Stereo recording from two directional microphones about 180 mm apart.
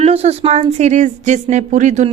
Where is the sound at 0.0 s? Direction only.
35° right (ahead or behind).